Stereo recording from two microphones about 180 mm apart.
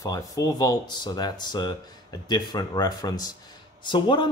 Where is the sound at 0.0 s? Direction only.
20° left (ahead or behind).